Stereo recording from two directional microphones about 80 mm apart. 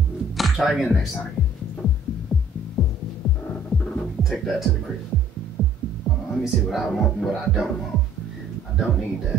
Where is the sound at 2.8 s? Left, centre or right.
Centre.